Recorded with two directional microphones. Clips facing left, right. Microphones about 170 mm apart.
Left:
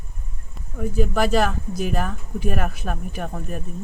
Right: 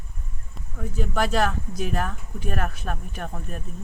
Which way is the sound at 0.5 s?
5° left (ahead or behind).